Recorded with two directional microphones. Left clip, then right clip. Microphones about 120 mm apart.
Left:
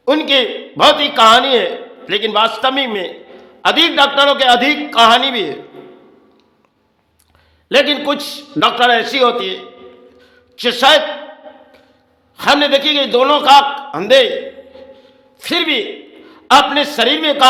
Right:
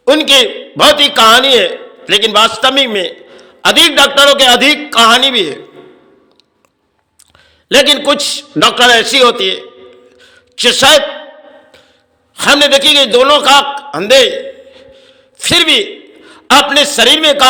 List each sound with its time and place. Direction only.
0.0 s a man's voice: 20° right (ahead or behind)
7.7 s a man's voice: 25° right (ahead or behind)
10.2 s a sound: 25° right (ahead or behind)
12.4 s a man's voice: 25° right (ahead or behind)
14.1 s a sound: 15° right (ahead or behind)
16.7 s a man's voice: 20° right (ahead or behind)